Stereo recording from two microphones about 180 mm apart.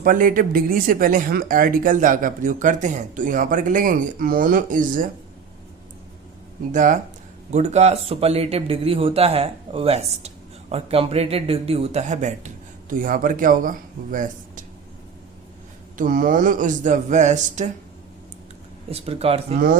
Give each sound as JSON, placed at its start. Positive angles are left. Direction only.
{"t": 0.0, "sound": "speech", "side_deg": -50}
{"t": 6.7, "sound": "speech", "side_deg": -45}
{"t": 16.0, "sound": "speech", "side_deg": -50}
{"t": 18.9, "sound": "speech", "side_deg": -35}